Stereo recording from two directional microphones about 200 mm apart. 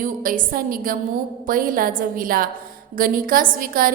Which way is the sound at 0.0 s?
45° right (ahead or behind).